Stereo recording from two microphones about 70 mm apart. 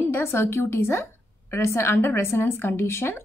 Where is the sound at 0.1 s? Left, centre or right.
Left.